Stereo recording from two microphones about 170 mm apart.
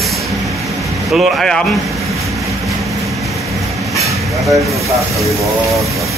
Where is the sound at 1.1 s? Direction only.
Centre (ahead or behind).